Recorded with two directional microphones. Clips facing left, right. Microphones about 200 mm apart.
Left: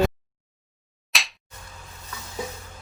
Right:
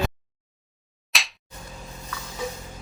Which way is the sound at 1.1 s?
Centre (ahead or behind).